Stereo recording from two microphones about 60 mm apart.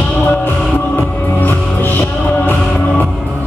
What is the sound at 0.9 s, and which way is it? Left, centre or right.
Music, left.